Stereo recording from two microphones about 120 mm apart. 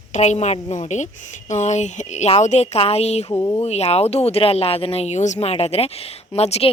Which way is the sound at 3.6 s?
65° left (ahead or behind).